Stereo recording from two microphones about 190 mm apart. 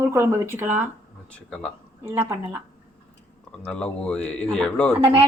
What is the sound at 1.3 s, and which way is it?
Speech, 5° left (ahead or behind).